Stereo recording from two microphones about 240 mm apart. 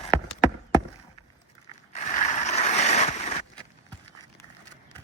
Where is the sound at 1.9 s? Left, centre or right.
Left.